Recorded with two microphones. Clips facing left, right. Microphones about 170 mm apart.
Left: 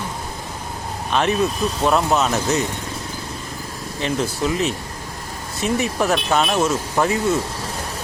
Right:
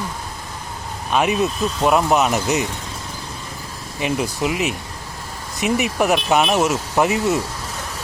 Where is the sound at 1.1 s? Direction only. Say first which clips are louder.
Right 1 dB; 10° right (ahead or behind).